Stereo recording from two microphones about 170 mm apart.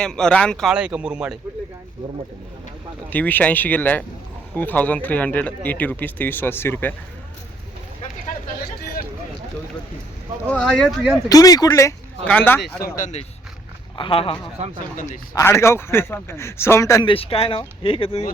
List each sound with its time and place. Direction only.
0.0 s speech: 5° left (ahead or behind)
3.1 s speech: 10° left (ahead or behind)
10.4 s speech: 5° left (ahead or behind)
11.3 s speech: 20° left (ahead or behind)
13.0 s speech: 45° left (ahead or behind)
13.9 s speech: 30° left (ahead or behind)
14.9 s speech: 45° left (ahead or behind)
15.4 s speech: 15° left (ahead or behind)
17.1 s speech: 35° left (ahead or behind)